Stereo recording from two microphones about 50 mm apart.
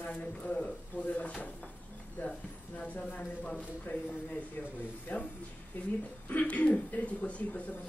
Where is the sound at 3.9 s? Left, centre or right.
Left.